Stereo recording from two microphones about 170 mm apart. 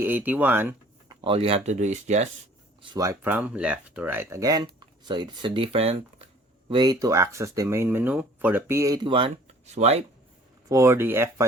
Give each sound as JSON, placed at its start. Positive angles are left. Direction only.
{"t": 0.0, "sound": "speech", "side_deg": -10}
{"t": 1.0, "sound": "speech", "side_deg": -30}
{"t": 2.8, "sound": "speech", "side_deg": -20}
{"t": 6.7, "sound": "speech", "side_deg": -25}
{"t": 9.0, "sound": "speech", "side_deg": -30}
{"t": 10.7, "sound": "speech", "side_deg": -15}